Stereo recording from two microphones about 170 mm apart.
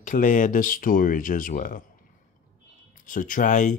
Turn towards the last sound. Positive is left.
turn(degrees=50)  # may be behind; listen again after turning